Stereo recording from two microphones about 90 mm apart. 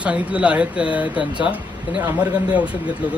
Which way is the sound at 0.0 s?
15° right (ahead or behind).